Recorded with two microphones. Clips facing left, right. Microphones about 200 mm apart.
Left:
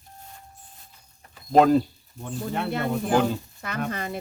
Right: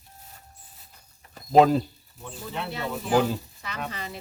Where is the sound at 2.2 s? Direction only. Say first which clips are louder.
Left 6 dB; 50° left (ahead or behind).